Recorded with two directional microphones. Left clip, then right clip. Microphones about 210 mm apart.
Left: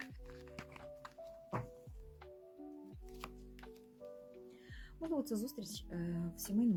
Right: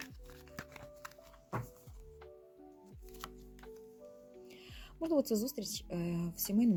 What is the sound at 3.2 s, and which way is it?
Music, 5° right (ahead or behind).